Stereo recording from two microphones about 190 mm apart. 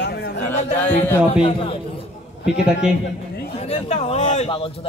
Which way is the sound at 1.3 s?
30° left (ahead or behind).